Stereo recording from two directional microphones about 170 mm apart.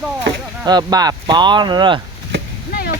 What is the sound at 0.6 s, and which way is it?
Speech, 25° right (ahead or behind).